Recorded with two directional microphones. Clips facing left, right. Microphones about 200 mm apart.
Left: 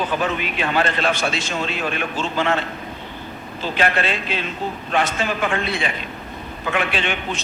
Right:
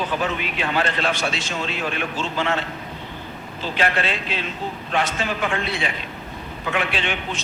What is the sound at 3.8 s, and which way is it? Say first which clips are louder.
Speech: left 2 dB; 50° left (ahead or behind).